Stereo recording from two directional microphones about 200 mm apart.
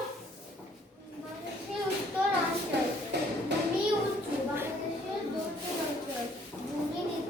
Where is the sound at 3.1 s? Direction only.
60° right (ahead or behind).